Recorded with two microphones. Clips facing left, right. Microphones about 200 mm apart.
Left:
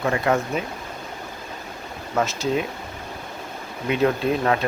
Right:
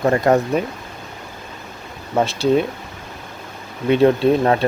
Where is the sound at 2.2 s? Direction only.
35° right (ahead or behind).